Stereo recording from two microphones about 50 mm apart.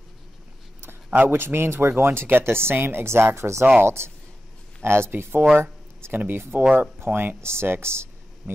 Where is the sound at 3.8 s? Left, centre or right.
Right.